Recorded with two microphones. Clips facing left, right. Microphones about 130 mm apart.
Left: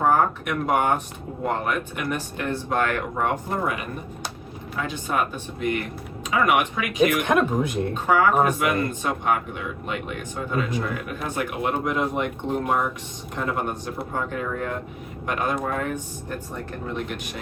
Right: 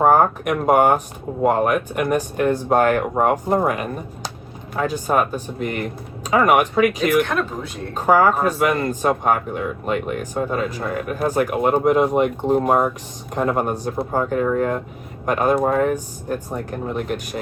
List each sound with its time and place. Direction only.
0.0 s speech: 45° right (ahead or behind)
7.3 s speech: 15° left (ahead or behind)
7.9 s speech: 40° right (ahead or behind)